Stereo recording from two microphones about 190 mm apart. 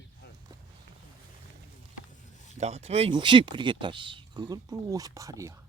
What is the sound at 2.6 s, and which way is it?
Speech, 35° right (ahead or behind).